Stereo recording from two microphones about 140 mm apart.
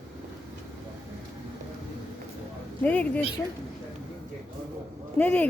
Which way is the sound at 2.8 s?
10° left (ahead or behind).